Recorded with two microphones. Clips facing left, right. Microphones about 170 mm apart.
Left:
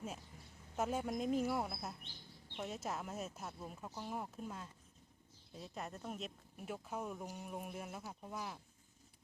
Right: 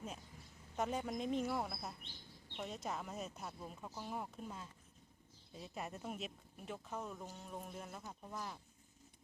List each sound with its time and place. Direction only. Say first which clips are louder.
0.8 s speech: left 1 dB; 5° left (ahead or behind)